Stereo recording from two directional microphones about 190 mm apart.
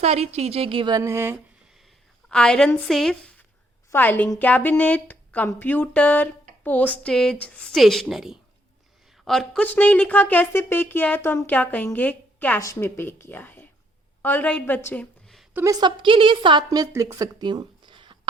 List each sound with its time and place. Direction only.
0.0 s a woman's voice: 35° right (ahead or behind); by 1.4 s 15° right (ahead or behind)
2.3 s a woman's voice: 5° left (ahead or behind)
15.5 s a woman's voice: 20° right (ahead or behind)